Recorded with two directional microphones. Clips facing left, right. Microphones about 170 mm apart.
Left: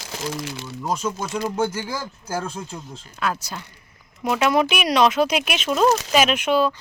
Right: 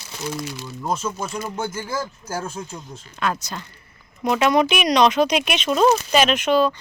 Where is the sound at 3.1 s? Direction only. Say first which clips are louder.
Right 1 dB; 5° left (ahead or behind).